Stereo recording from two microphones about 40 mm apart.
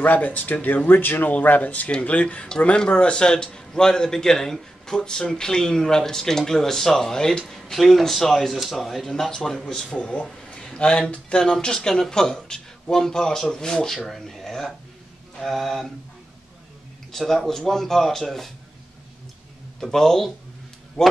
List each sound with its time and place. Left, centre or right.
0.0 s speech: left
0.8 s a man's voice: left
1.3 s speech: left; by 9.3 s centre
9.3 s speech: centre
10.5 s a sound: left
11.1 s speech: left; by 15.9 s centre
17.1 s speech: centre
19.8 s speech: centre